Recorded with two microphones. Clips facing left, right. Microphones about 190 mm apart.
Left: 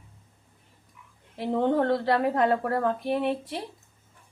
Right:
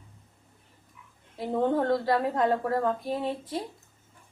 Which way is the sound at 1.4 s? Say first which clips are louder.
Left 2 dB; 70° left (ahead or behind).